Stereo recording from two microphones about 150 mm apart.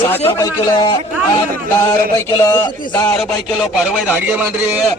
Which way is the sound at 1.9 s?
20° left (ahead or behind).